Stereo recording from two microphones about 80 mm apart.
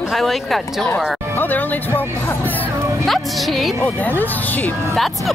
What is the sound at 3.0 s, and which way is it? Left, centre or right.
Speech, centre.